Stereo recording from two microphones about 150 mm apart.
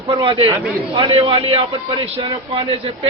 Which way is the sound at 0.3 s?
35° right (ahead or behind).